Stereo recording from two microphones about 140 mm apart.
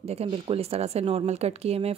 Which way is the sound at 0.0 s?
45° right (ahead or behind).